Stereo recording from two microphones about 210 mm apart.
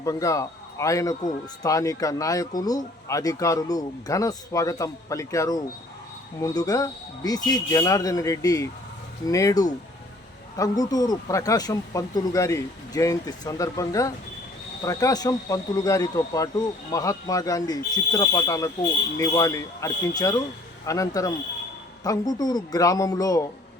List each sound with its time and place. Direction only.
0.0 s a man's voice: 15° left (ahead or behind)